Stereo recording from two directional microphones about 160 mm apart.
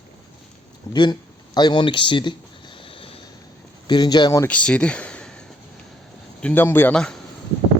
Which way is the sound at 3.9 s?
25° left (ahead or behind).